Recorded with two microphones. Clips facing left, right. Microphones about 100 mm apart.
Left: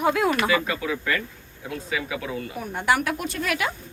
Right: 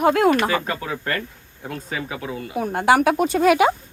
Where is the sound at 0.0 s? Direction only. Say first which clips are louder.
Right 5 dB; 55° right (ahead or behind).